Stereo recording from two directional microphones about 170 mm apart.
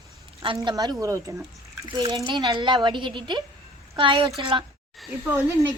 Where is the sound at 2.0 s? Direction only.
25° right (ahead or behind).